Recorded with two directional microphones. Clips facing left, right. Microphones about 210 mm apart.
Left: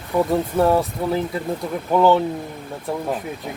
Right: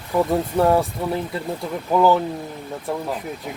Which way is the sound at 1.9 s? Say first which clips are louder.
Left 1 dB; centre (ahead or behind).